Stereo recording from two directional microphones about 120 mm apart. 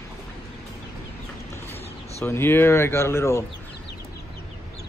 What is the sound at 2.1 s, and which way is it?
Speech, 20° left (ahead or behind).